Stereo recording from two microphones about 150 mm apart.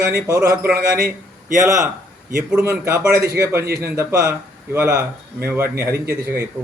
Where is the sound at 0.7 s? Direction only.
75° right (ahead or behind).